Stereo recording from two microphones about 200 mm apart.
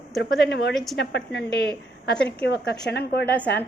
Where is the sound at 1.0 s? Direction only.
60° left (ahead or behind).